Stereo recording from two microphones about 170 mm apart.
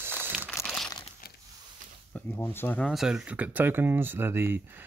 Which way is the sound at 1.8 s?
50° right (ahead or behind).